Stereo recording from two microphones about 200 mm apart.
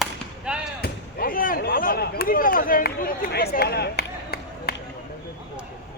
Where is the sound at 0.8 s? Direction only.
45° left (ahead or behind).